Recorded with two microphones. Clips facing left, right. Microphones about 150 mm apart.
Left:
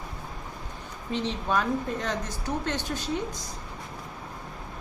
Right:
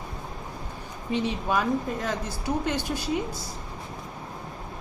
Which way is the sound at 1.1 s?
10° right (ahead or behind).